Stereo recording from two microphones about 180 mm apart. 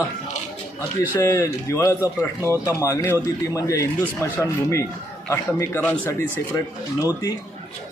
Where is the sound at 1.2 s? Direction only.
15° left (ahead or behind).